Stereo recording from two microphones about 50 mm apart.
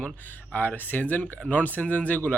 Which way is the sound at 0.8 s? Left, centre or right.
Left.